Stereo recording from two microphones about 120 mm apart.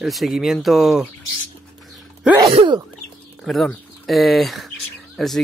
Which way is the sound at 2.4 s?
50° right (ahead or behind).